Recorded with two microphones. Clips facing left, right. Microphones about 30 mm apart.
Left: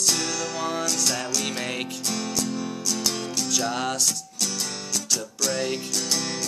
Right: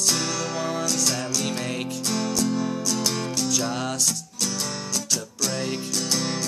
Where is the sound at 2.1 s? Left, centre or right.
Centre.